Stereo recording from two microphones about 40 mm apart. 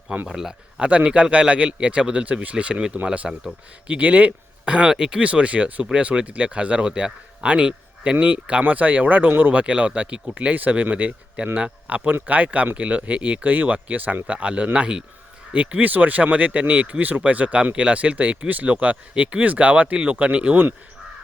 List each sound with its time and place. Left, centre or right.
0.3 s speech: centre
0.8 s speech: right
4.9 s speech: centre
5.2 s speech: right
8.6 s speech: right
10.5 s speech: right
13.4 s speech: right
14.3 s speech: right
17.0 s speech: right